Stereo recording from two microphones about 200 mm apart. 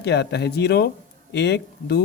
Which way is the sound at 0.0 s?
55° left (ahead or behind).